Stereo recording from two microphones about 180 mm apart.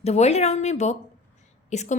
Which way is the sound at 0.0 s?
35° left (ahead or behind).